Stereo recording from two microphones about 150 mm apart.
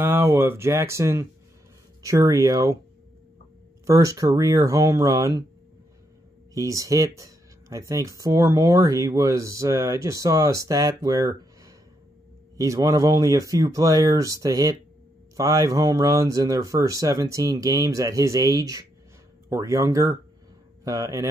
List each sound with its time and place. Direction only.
0.0 s speech: 15° right (ahead or behind)
3.8 s speech: 20° right (ahead or behind)
6.5 s speech: 20° right (ahead or behind)